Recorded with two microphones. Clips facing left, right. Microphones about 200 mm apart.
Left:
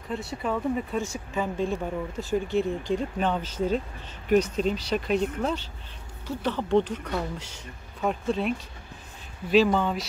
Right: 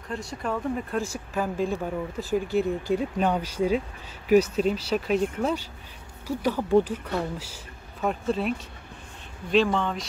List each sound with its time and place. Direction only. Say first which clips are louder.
0.1 s speech: left 1 dB; 5° left (ahead or behind)